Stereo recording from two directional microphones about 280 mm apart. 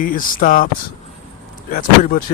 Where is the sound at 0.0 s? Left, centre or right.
Left.